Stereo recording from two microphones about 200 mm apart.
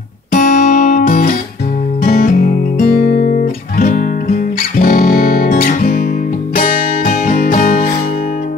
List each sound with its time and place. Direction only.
0.3 s music: 40° left (ahead or behind)